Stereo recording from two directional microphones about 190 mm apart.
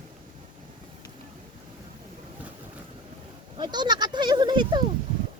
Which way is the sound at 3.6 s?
25° right (ahead or behind).